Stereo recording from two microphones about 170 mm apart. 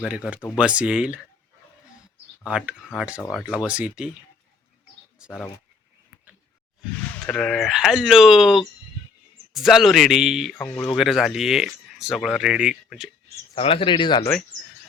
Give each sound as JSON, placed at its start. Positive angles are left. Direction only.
{"t": 0.0, "sound": "speech", "side_deg": -5}
{"t": 2.4, "sound": "speech", "side_deg": -5}
{"t": 7.3, "sound": "speech", "side_deg": 5}
{"t": 13.6, "sound": "speech", "side_deg": 30}